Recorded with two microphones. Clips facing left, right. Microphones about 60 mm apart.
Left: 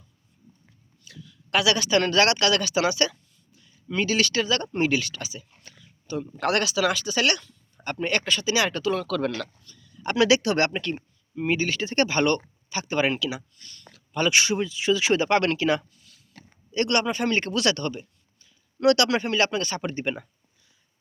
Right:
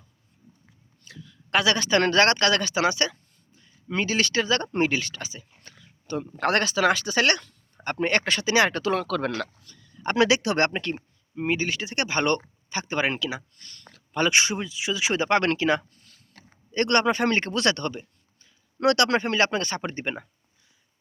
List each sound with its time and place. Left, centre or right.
1.0 s speech: right
5.8 s a sound: right
6.4 s speech: right; by 12.1 s centre
12.1 s speech: right
13.6 s a sound: right
14.1 s speech: right
15.3 s speech: right
15.9 s a sound: right
16.7 s speech: right